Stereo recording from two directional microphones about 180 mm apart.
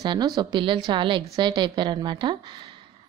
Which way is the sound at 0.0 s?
25° right (ahead or behind).